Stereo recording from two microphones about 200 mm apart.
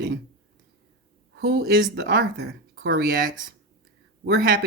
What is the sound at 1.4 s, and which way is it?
Speech, 55° right (ahead or behind).